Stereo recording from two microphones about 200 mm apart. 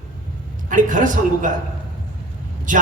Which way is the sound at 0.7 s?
40° right (ahead or behind).